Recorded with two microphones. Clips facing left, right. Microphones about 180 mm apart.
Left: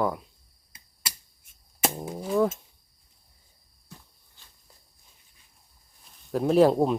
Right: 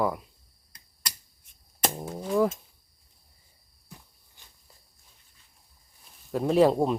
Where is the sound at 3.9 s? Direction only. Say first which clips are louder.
Even; 15° right (ahead or behind).